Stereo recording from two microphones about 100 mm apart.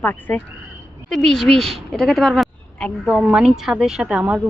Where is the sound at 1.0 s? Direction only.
5° left (ahead or behind).